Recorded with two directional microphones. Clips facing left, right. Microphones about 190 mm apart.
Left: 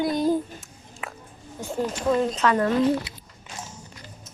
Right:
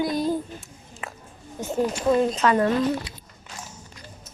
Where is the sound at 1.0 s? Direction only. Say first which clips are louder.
Left 1 dB; centre (ahead or behind).